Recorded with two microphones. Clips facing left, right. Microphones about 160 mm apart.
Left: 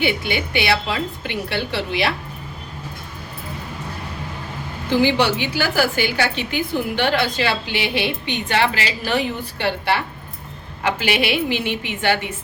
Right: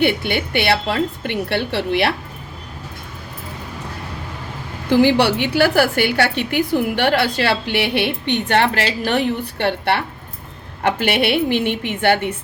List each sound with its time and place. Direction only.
0.0 s a woman's voice: 60° right (ahead or behind)
4.9 s a woman's voice: 60° right (ahead or behind)
10.8 s a woman's voice: 55° right (ahead or behind)